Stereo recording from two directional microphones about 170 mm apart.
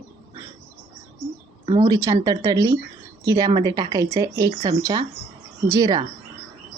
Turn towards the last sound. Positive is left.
turn(degrees=-20)  # may be behind; listen again after turning